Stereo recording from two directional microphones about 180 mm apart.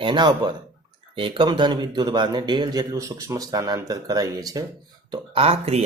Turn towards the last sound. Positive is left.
turn(degrees=-35)  # may be behind; listen again after turning